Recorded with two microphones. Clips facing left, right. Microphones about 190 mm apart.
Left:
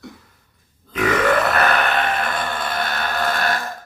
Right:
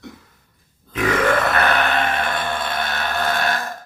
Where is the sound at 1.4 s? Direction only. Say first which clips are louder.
Even; centre (ahead or behind).